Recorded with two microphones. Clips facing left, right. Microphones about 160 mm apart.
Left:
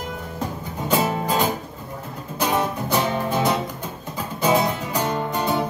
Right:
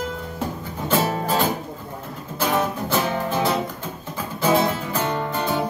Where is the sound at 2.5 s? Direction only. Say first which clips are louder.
Even; 15° left (ahead or behind).